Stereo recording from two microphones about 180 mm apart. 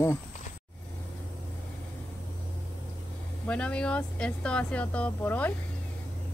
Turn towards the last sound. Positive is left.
turn(degrees=10)  # may be behind; listen again after turning